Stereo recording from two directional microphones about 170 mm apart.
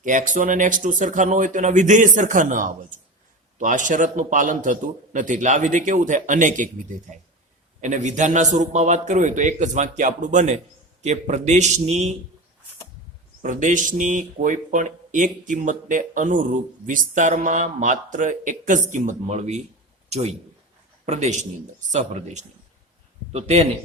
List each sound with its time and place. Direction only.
0.0 s speech: 50° right (ahead or behind)
7.8 s speech: 45° right (ahead or behind)
13.4 s a man's voice: 45° right (ahead or behind)